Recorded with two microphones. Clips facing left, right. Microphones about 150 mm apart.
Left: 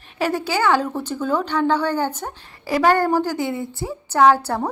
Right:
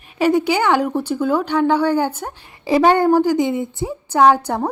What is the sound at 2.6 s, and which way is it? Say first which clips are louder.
A woman's voice: right 4 dB; 20° right (ahead or behind).